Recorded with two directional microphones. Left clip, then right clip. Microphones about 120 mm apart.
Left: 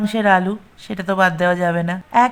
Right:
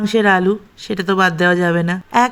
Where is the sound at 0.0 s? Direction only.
20° right (ahead or behind).